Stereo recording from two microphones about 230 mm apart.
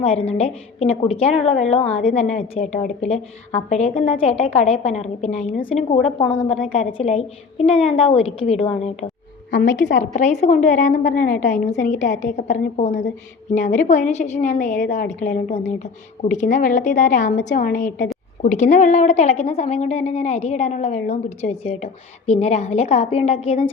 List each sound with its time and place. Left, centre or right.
0.0 s a woman's voice: left
9.5 s a woman's voice: left
10.0 s a woman's voice: left